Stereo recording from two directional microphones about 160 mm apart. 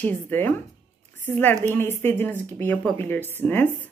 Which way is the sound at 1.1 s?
10° left (ahead or behind).